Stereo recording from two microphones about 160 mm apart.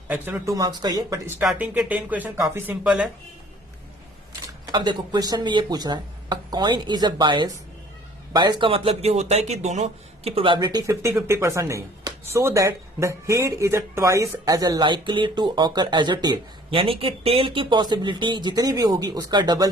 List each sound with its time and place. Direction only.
0.1 s a man's voice: 15° right (ahead or behind)
1.4 s speech: 10° right (ahead or behind)
4.6 s a man's voice: 25° right (ahead or behind)